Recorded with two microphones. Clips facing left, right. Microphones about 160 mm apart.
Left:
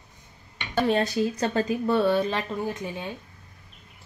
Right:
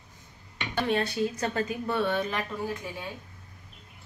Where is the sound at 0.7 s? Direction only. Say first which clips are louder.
Left 4 dB; 35° left (ahead or behind).